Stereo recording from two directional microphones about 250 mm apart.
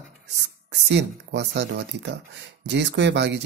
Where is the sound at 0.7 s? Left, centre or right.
Right.